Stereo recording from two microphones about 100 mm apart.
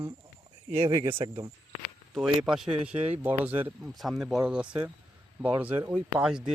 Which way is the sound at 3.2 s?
20° right (ahead or behind).